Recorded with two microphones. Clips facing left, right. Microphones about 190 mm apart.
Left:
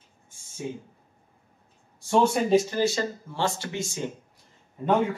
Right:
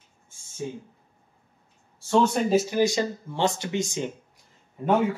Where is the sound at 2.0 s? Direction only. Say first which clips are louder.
Even; 15° left (ahead or behind).